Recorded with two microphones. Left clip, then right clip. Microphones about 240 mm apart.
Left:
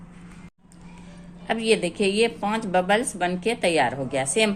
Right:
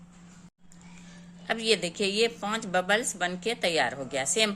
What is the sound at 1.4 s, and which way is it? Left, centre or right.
Speech, right.